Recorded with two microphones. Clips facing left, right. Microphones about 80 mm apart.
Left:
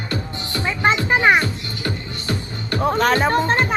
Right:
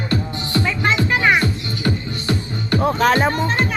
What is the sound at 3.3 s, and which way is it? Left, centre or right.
Music, left.